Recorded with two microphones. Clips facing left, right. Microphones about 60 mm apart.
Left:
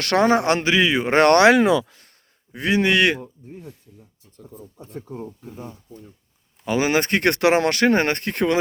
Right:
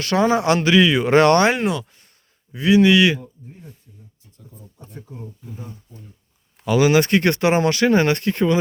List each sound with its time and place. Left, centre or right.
0.0 s speech: left
0.6 s a man's voice: left
1.1 s speech: left
2.5 s speech: left
6.7 s speech: left
7.2 s speech: left
7.7 s speech: left